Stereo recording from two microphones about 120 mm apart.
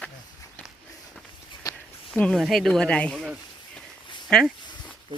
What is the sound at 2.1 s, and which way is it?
Speech, 10° left (ahead or behind).